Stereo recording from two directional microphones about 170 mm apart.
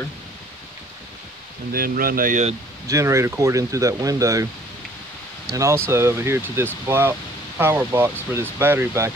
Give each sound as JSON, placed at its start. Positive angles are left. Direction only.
{"t": 1.7, "sound": "speech", "side_deg": -60}
{"t": 2.9, "sound": "speech", "side_deg": -15}
{"t": 5.5, "sound": "speech", "side_deg": -20}